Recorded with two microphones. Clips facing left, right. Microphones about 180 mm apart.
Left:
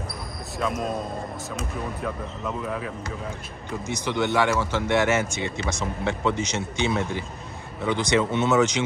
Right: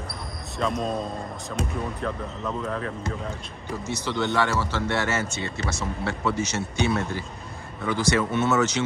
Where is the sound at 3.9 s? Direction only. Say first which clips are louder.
Left 2 dB; 15° left (ahead or behind).